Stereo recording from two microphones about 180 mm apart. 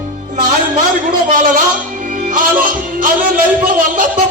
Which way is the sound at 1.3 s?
45° right (ahead or behind).